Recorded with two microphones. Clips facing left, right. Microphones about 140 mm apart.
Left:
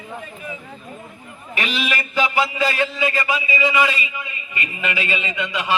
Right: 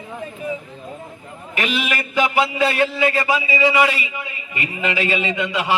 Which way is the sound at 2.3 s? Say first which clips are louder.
Right 3 dB; 25° right (ahead or behind).